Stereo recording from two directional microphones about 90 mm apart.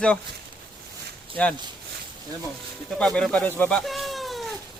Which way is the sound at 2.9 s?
10° left (ahead or behind).